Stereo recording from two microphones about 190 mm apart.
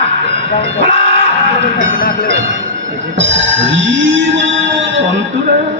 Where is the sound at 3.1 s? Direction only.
75° right (ahead or behind).